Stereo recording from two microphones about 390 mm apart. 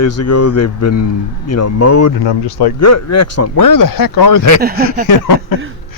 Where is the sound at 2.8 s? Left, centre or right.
Left.